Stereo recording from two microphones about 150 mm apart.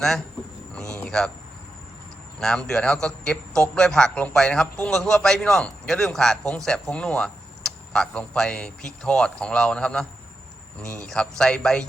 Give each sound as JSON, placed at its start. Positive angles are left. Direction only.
{"t": 0.7, "sound": "speech", "side_deg": 5}
{"t": 2.4, "sound": "a man's voice", "side_deg": 5}